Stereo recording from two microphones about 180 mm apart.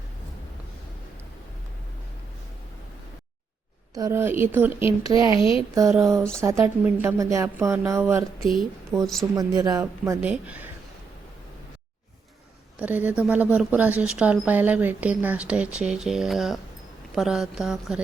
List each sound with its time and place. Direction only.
3.9 s speech: 15° right (ahead or behind)
5.3 s speech: 30° left (ahead or behind)
5.7 s speech: 20° right (ahead or behind)
8.4 s a woman's voice: centre (ahead or behind)
9.3 s speech: 20° right (ahead or behind)
9.8 s speech: 10° right (ahead or behind)
12.8 s a woman's voice: 10° right (ahead or behind)